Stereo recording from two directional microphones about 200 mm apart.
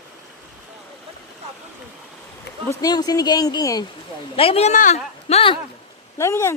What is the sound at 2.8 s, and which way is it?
Speech, 20° left (ahead or behind).